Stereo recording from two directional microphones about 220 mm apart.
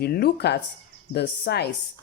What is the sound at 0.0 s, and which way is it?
Speech, 45° left (ahead or behind).